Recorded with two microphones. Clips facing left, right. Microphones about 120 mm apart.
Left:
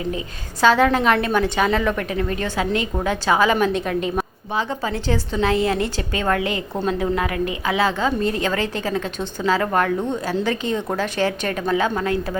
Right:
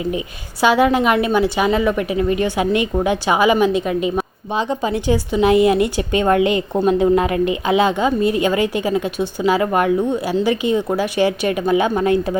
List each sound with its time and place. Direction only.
0.6 s a woman's voice: 10° right (ahead or behind)